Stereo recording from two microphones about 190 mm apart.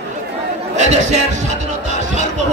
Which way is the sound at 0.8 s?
35° right (ahead or behind).